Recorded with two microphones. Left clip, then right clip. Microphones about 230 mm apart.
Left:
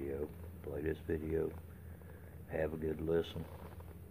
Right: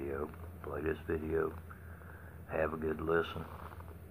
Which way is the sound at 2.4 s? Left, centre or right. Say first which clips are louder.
Right 3 dB; left.